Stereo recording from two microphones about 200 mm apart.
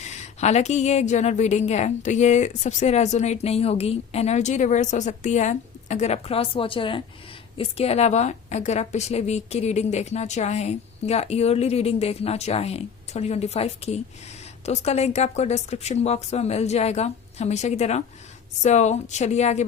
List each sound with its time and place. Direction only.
0.0 s a woman's voice: 35° left (ahead or behind)